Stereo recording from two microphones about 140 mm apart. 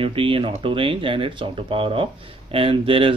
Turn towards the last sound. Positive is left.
turn(degrees=-40)  # may be behind; listen again after turning